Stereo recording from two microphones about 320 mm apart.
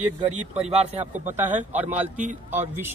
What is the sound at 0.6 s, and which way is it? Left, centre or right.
Speech, centre.